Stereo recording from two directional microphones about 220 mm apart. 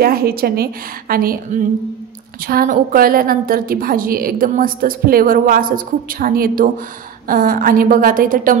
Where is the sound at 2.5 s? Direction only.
40° right (ahead or behind).